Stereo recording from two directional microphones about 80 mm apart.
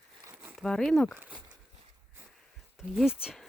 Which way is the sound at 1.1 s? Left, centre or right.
Centre.